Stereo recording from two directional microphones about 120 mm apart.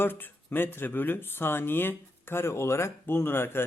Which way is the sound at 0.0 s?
15° left (ahead or behind).